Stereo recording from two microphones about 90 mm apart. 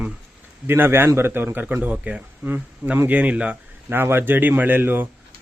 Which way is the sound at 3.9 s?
25° right (ahead or behind).